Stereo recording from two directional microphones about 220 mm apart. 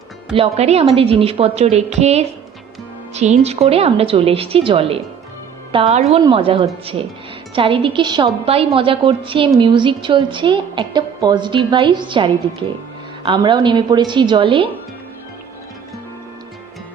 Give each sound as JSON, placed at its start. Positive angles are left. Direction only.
{"t": 0.3, "sound": "a woman's voice", "side_deg": -25}